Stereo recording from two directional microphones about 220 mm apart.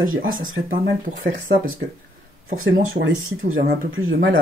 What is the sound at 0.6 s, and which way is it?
Speech, 50° right (ahead or behind).